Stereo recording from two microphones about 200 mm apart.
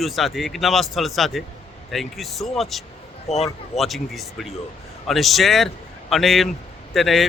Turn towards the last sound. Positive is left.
turn(degrees=0)  # may be behind; listen again after turning